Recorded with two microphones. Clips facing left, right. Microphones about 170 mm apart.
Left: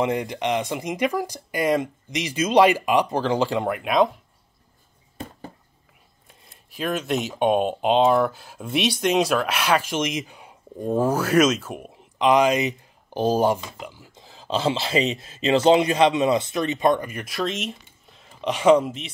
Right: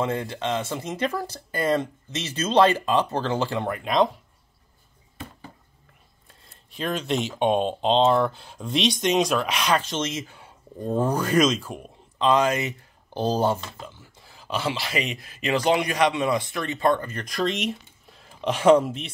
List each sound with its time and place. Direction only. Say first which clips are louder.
0.0 s speech: left 3 dB; 15° left (ahead or behind)
5.1 s a sound: left 4 dB; 40° left (ahead or behind)
6.7 s speech: left 1 dB; 5° left (ahead or behind)